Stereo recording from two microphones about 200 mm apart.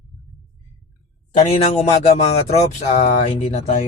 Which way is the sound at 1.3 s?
35° left (ahead or behind).